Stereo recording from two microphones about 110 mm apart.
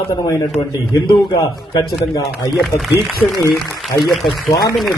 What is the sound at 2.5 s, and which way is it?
Speech, centre (ahead or behind).